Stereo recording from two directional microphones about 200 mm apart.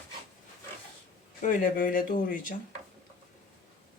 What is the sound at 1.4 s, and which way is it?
Speech, 40° left (ahead or behind).